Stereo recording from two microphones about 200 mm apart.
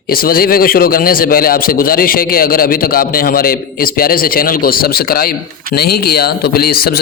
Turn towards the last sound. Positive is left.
turn(degrees=50)  # may be behind; listen again after turning